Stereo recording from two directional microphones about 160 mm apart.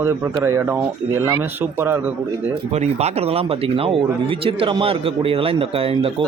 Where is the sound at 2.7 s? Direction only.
45° right (ahead or behind).